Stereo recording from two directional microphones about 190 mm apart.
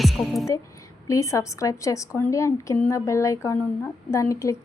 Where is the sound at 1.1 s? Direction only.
15° left (ahead or behind).